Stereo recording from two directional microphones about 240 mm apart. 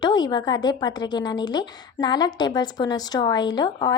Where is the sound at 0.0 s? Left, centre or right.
Centre.